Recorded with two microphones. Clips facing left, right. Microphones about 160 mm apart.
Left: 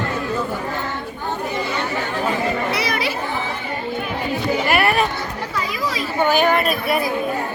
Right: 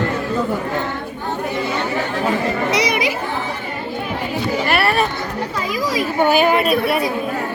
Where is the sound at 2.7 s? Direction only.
15° right (ahead or behind).